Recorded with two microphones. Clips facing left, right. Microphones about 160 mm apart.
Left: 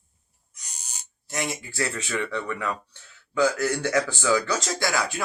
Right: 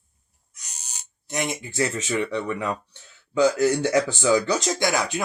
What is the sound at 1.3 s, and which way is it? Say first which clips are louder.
Speech: right 3 dB; 20° right (ahead or behind).